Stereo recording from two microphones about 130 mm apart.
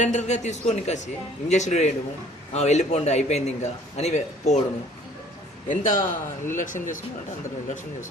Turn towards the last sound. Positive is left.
turn(degrees=90)